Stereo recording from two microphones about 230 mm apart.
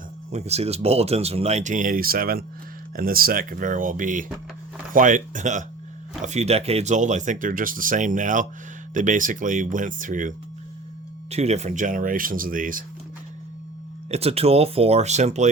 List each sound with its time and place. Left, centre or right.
0.3 s speech: right
14.1 s speech: right